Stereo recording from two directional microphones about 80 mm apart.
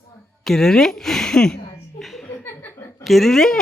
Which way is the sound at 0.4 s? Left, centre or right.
Centre.